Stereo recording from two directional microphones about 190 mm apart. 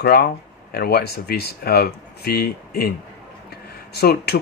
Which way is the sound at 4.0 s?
55° left (ahead or behind).